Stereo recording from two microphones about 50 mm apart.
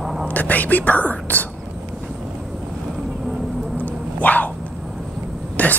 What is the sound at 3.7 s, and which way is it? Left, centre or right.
Dog, left.